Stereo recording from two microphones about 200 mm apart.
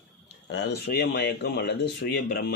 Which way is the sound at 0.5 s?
55° left (ahead or behind).